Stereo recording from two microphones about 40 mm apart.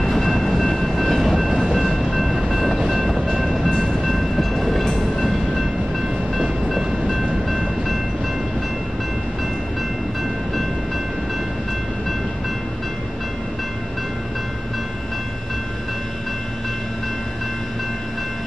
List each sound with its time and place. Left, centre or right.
0.0 s train: centre
3.7 s train: centre